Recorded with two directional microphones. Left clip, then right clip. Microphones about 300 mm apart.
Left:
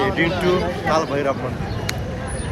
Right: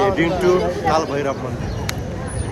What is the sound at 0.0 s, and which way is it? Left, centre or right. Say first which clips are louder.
Speech: right 2 dB; centre.